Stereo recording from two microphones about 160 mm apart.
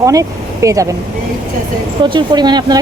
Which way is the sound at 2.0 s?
30° right (ahead or behind).